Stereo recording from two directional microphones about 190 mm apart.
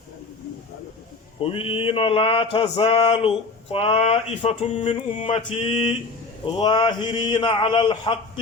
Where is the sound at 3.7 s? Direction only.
30° left (ahead or behind).